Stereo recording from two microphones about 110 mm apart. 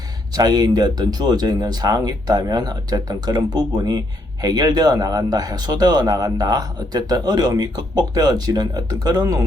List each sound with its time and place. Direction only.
0.3 s speech: 35° right (ahead or behind)